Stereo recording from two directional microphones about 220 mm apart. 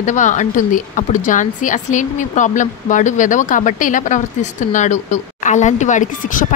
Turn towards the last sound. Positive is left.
turn(degrees=35)  # may be behind; listen again after turning